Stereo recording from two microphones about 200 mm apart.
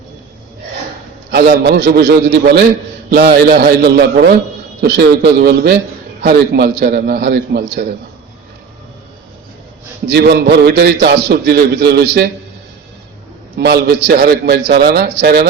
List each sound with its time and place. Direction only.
1.3 s a man's voice: 55° right (ahead or behind)
10.1 s a man's voice: 55° right (ahead or behind)
13.6 s a man's voice: 55° right (ahead or behind)